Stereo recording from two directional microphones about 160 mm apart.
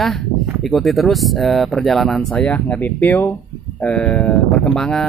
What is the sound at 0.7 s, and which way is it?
Speech, centre (ahead or behind).